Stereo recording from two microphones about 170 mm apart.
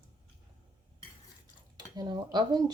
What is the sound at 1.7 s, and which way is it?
Speech, 25° right (ahead or behind).